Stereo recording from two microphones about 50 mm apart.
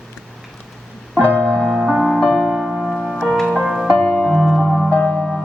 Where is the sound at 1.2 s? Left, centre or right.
Right.